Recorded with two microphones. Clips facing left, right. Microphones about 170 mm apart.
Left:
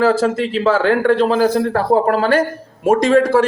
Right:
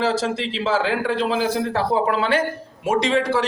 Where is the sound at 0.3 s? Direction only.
50° left (ahead or behind).